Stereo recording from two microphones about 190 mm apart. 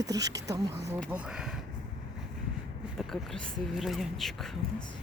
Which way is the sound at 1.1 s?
5° right (ahead or behind).